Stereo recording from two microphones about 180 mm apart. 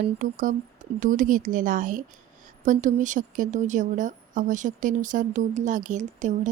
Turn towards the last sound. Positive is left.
turn(degrees=-45)  # may be behind; listen again after turning